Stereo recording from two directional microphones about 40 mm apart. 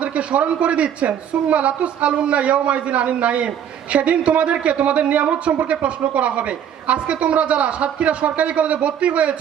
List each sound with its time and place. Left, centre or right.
0.0 s a woman's voice: right